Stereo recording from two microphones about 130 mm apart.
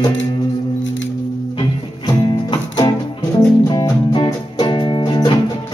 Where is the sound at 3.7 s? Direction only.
35° left (ahead or behind).